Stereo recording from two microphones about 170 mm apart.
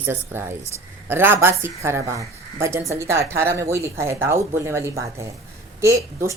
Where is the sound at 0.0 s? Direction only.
15° right (ahead or behind).